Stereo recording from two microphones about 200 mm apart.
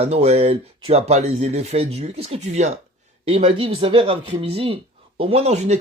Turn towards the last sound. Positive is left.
turn(degrees=-30)  # may be behind; listen again after turning